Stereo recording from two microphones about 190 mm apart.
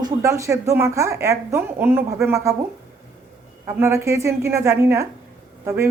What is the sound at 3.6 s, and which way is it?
A woman's voice, 15° right (ahead or behind).